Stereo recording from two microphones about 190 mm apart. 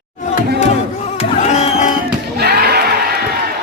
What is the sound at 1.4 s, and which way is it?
Music, 35° left (ahead or behind).